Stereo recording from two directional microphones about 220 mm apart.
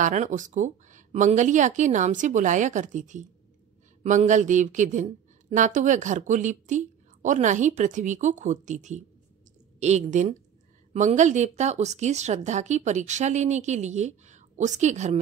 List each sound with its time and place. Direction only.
0.0 s a woman's voice: 35° right (ahead or behind)